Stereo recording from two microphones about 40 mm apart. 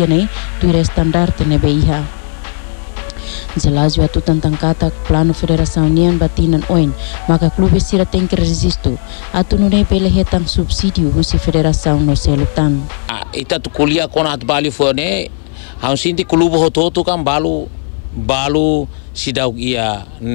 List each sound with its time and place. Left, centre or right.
0.0 s speech: centre